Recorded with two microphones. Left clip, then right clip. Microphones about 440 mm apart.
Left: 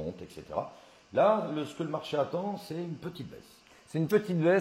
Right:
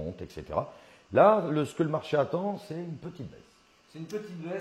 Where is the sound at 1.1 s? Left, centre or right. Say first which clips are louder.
Right 4 dB; right.